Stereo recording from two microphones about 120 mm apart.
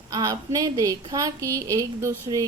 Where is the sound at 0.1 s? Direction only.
30° right (ahead or behind).